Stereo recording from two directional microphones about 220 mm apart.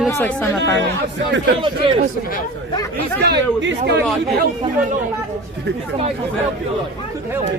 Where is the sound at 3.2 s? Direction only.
50° right (ahead or behind).